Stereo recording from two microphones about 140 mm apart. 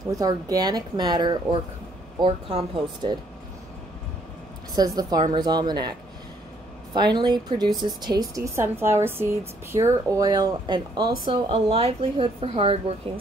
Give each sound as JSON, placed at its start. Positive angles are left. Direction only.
{"t": 0.1, "sound": "a woman's voice", "side_deg": -25}
{"t": 4.7, "sound": "a woman's voice", "side_deg": -30}